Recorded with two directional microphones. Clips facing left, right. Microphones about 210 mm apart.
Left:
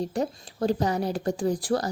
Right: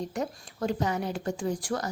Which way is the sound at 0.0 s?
35° left (ahead or behind).